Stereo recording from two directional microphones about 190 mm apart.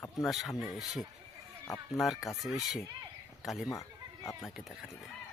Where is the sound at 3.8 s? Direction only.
15° left (ahead or behind).